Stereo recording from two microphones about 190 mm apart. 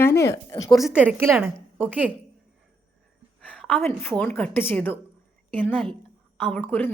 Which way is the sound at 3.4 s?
5° left (ahead or behind).